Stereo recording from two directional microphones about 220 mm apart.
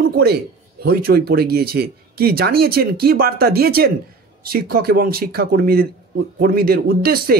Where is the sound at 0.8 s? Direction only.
45° right (ahead or behind).